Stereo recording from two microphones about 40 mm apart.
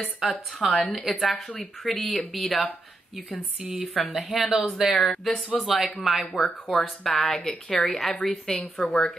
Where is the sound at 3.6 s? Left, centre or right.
Right.